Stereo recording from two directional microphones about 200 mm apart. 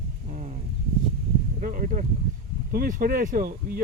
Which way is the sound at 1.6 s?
45° right (ahead or behind).